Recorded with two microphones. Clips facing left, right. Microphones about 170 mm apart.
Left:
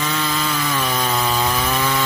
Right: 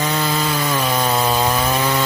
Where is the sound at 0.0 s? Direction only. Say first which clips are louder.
Right 3 dB; 35° right (ahead or behind).